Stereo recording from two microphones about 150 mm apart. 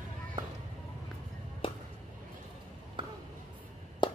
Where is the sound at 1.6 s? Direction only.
35° left (ahead or behind).